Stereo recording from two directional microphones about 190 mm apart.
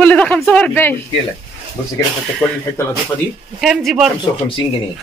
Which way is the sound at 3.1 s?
15° left (ahead or behind).